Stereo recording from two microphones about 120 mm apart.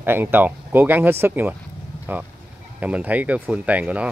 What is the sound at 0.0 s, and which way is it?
Speech, 15° right (ahead or behind).